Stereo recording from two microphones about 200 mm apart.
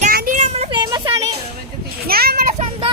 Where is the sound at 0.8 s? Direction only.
20° right (ahead or behind).